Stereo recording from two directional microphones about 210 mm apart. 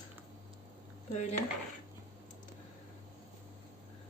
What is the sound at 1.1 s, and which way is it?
Speech, 35° left (ahead or behind).